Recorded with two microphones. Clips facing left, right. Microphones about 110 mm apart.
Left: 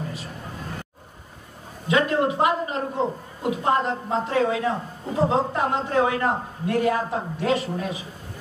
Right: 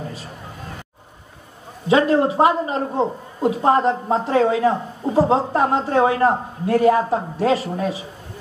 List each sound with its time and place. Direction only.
1.9 s a woman's voice: 30° right (ahead or behind)